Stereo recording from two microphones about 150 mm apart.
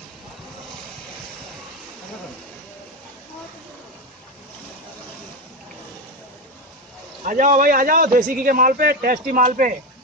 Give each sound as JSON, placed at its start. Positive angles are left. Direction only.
{"t": 7.2, "sound": "a man's voice", "side_deg": -60}